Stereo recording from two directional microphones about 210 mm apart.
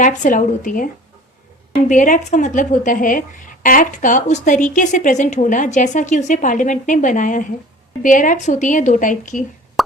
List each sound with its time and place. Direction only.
0.0 s speech: 35° left (ahead or behind)
1.9 s speech: 35° left (ahead or behind)